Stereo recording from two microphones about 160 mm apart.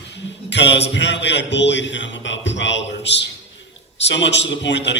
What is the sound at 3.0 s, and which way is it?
A man's voice, 90° left.